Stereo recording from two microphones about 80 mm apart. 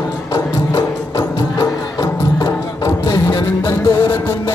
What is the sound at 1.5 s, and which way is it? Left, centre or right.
Music, left.